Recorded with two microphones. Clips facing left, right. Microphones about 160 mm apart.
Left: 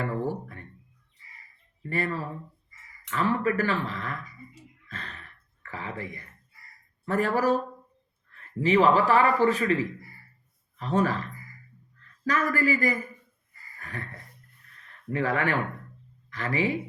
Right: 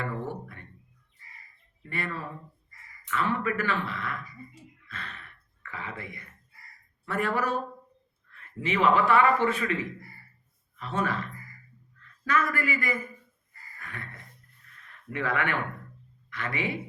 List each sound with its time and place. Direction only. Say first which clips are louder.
0.0 s music: left 4 dB; 35° left (ahead or behind)
1.8 s speech: left 5 dB; 35° left (ahead or behind)
4.9 s sigh: left 1 dB; 35° left (ahead or behind)
7.0 s a man's voice: left 4 dB; 35° left (ahead or behind)
13.7 s a sound: left 4 dB; 35° left (ahead or behind)
15.1 s speech: left 3 dB; 35° left (ahead or behind)